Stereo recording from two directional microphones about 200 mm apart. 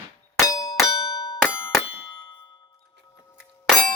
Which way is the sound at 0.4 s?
20° left (ahead or behind).